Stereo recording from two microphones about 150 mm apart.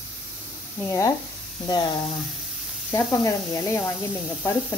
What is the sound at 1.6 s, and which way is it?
Speech, 30° left (ahead or behind).